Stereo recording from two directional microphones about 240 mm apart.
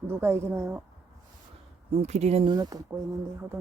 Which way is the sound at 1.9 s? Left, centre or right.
Right.